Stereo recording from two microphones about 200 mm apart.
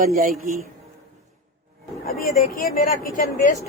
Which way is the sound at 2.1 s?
45° left (ahead or behind).